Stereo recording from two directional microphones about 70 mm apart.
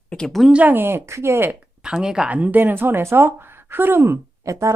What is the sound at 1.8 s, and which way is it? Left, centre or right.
Speech, centre.